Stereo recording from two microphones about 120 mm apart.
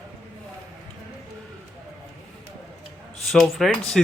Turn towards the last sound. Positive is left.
turn(degrees=5)  # may be behind; listen again after turning